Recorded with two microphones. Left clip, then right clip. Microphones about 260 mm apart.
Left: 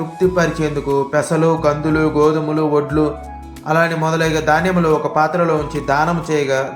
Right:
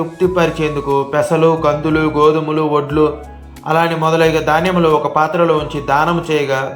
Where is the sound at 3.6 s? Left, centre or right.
Centre.